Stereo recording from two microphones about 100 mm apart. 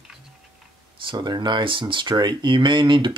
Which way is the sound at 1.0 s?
45° right (ahead or behind).